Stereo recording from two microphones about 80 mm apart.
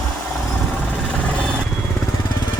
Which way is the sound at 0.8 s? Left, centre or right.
Centre.